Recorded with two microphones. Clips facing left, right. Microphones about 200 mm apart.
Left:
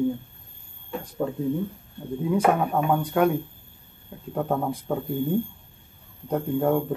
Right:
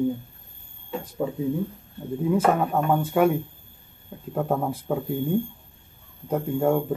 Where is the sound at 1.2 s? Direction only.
5° right (ahead or behind).